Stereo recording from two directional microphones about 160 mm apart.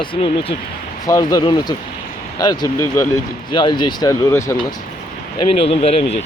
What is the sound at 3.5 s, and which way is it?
Speech, 30° left (ahead or behind).